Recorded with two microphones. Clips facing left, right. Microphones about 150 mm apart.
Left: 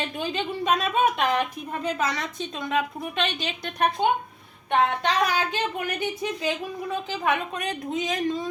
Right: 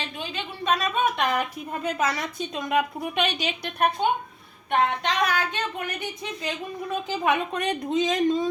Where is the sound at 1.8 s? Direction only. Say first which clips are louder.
Right 1 dB; 10° right (ahead or behind).